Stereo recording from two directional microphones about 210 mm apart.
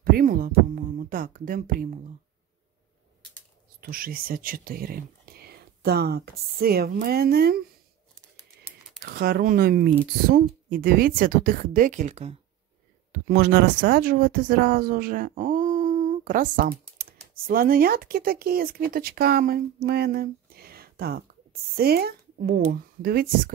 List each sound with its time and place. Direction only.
0.0 s speech: 45° right (ahead or behind)
3.8 s speech: 45° right (ahead or behind)
9.0 s speech: 45° right (ahead or behind)
13.3 s speech: 45° right (ahead or behind)